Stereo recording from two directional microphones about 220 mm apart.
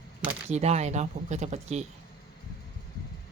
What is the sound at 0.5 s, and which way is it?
Speech, 30° right (ahead or behind).